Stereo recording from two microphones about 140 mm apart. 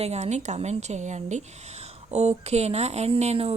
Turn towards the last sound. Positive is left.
turn(degrees=-50)  # may be behind; listen again after turning